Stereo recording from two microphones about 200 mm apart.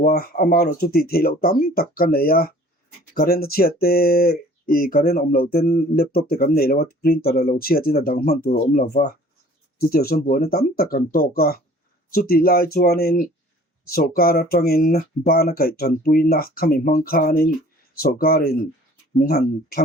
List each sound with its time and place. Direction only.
0.0 s speech: 50° left (ahead or behind)